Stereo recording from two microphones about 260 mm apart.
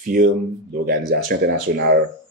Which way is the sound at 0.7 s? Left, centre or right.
Right.